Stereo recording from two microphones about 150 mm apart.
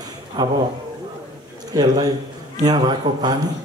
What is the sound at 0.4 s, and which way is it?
Speech, 25° right (ahead or behind).